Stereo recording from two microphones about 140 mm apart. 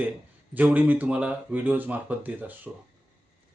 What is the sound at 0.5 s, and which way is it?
Speech, 10° right (ahead or behind).